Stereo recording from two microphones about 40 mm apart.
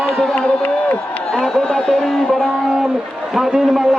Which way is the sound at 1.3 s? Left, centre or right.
Centre.